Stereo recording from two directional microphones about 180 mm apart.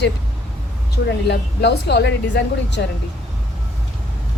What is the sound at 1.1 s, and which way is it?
Speech, 70° left (ahead or behind).